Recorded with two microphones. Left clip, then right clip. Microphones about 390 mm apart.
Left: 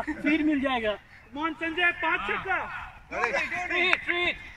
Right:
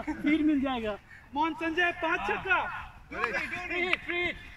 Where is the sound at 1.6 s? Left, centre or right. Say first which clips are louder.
Left 3 dB; right.